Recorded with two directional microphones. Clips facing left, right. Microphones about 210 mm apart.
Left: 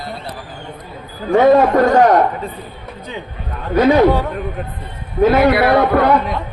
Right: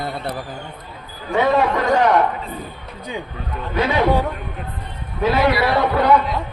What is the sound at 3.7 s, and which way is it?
Speech, 45° left (ahead or behind).